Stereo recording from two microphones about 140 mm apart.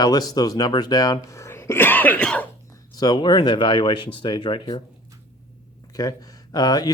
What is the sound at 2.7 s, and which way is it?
Speech, 30° left (ahead or behind).